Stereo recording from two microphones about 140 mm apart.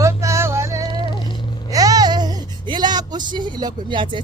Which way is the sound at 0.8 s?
35° left (ahead or behind).